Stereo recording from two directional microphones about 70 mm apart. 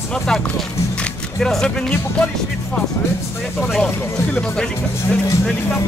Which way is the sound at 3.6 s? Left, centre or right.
Centre.